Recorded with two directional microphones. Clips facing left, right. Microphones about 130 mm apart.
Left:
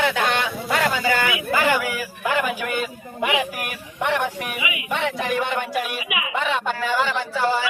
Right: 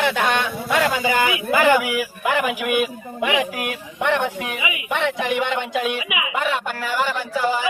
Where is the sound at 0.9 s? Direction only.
15° right (ahead or behind).